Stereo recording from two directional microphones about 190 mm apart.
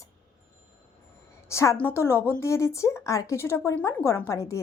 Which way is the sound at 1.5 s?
15° left (ahead or behind).